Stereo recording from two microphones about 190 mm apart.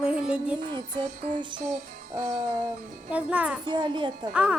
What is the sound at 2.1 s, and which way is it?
Music, 20° right (ahead or behind).